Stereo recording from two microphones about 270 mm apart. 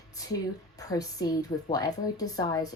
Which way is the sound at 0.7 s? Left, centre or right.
Centre.